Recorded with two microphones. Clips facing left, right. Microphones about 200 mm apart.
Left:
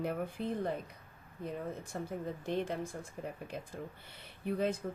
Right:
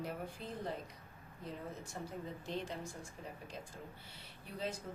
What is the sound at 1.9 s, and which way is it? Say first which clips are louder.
Speech: left 6 dB; 60° left (ahead or behind).